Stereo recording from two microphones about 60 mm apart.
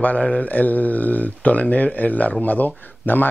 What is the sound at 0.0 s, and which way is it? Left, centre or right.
Speech, left.